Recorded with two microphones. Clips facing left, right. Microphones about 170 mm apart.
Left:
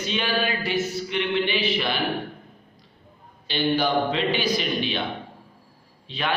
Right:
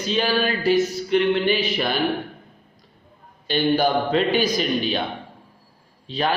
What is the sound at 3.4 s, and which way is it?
A man's voice, 45° right (ahead or behind).